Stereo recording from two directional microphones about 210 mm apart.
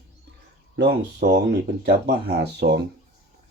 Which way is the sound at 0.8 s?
55° right (ahead or behind).